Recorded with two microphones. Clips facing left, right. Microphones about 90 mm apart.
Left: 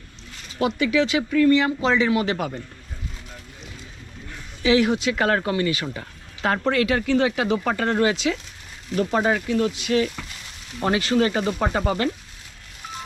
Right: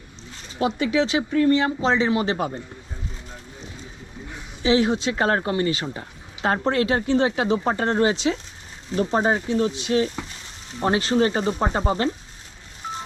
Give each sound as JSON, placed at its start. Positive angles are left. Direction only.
{"t": 0.6, "sound": "speech", "side_deg": -25}
{"t": 4.3, "sound": "speech", "side_deg": -20}